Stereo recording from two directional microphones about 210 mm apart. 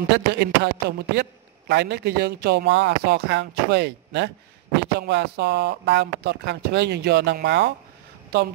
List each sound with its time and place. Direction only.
0.1 s speech: 50° right (ahead or behind)